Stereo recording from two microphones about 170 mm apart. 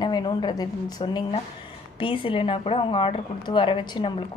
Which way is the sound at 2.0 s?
30° left (ahead or behind).